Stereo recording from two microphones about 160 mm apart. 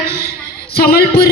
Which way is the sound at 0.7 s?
70° left (ahead or behind).